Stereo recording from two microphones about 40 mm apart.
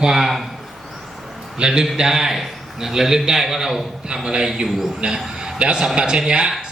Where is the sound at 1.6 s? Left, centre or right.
Centre.